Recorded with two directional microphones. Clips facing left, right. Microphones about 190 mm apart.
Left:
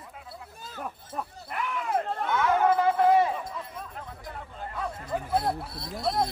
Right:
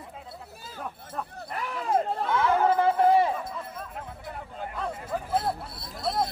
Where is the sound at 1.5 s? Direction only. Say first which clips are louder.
Right 2 dB; 35° right (ahead or behind).